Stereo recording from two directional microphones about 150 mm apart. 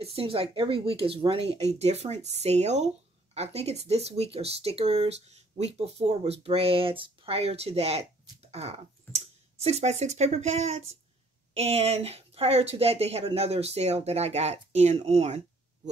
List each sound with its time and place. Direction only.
0.0 s speech: 40° right (ahead or behind)